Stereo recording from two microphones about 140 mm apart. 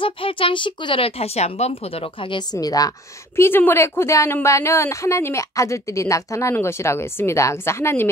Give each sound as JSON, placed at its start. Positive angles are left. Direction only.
{"t": 0.0, "sound": "a woman's voice", "side_deg": 40}